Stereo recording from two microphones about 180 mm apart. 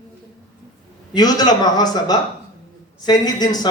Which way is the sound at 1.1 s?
20° left (ahead or behind).